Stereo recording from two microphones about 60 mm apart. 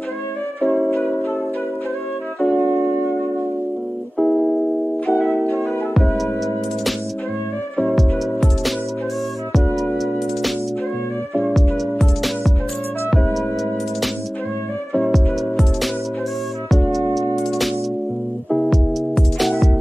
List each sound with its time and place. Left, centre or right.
0.6 s music: centre
2.6 s music: right
4.2 s music: centre
5.6 s music: centre
7.7 s music: centre
9.8 s music: centre
11.5 s music: centre
15.0 s music: centre
18.5 s music: centre